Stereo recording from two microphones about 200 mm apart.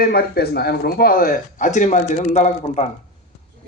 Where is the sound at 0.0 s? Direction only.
50° left (ahead or behind); by 2.8 s 35° left (ahead or behind).